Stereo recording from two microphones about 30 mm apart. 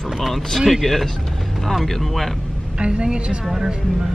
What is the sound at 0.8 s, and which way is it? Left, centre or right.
Speech, centre.